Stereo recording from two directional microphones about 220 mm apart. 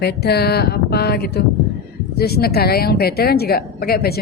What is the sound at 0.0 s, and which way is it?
A woman's voice, 45° left (ahead or behind).